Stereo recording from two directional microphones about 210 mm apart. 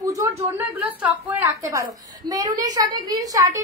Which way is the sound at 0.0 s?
15° right (ahead or behind).